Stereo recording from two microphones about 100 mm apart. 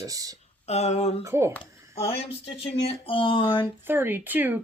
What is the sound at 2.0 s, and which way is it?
Speech, 85° left.